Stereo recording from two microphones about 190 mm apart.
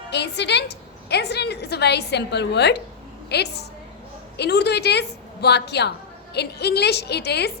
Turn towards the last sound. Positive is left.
turn(degrees=60)  # may be behind; listen again after turning